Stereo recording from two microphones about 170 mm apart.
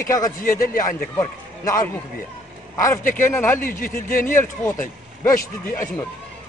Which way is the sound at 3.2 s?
15° left (ahead or behind).